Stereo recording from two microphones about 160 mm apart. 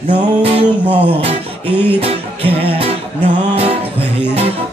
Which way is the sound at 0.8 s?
10° right (ahead or behind).